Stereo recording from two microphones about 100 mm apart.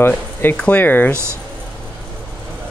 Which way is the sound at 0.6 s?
15° left (ahead or behind).